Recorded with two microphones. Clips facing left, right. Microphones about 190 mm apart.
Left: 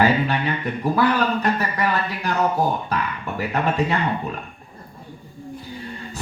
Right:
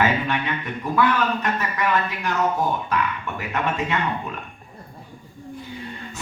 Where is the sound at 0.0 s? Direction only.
35° left (ahead or behind).